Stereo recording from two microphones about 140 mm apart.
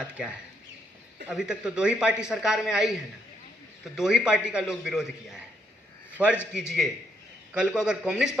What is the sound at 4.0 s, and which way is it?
Speech, 5° right (ahead or behind).